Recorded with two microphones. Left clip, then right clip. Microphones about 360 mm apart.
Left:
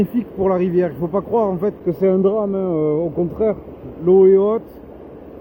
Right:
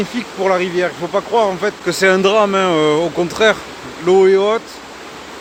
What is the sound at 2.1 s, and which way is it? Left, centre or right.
Speech, right.